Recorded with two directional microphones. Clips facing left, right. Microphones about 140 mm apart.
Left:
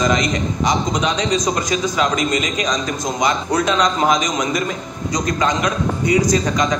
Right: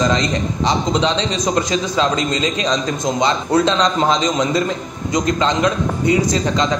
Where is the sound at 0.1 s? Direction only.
30° right (ahead or behind).